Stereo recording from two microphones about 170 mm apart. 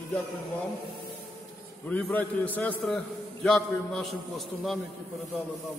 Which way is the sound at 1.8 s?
10° left (ahead or behind).